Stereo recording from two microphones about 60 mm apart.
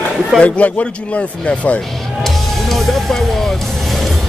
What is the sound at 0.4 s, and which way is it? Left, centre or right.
Speech, left.